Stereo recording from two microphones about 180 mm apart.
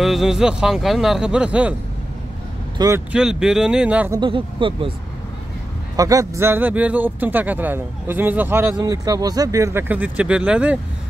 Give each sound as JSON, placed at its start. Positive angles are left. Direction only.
{"t": 0.0, "sound": "speech", "side_deg": 0}
{"t": 3.1, "sound": "speech", "side_deg": -5}
{"t": 4.1, "sound": "speech", "side_deg": -25}
{"t": 5.9, "sound": "a man's voice", "side_deg": -20}